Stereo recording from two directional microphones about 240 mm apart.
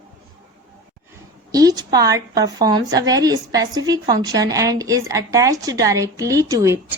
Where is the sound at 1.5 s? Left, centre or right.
Centre.